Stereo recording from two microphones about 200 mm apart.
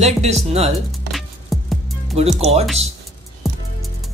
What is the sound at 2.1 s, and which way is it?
Speech, 30° right (ahead or behind).